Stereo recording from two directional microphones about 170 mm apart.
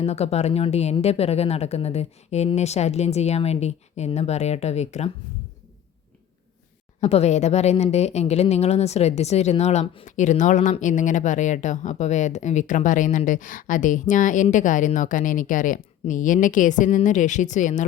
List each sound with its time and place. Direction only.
0.0 s speech: 40° left (ahead or behind)
7.0 s speech: 40° left (ahead or behind)
10.1 s a woman's voice: 45° left (ahead or behind)